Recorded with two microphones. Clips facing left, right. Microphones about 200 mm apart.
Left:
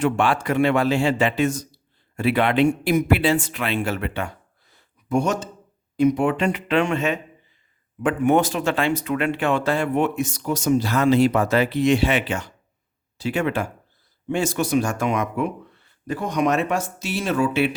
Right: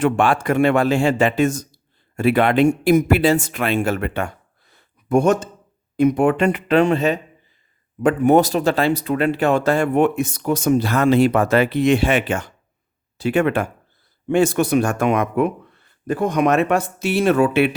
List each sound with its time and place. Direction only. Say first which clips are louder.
0.0 s a man's voice: right 3 dB; 50° right (ahead or behind)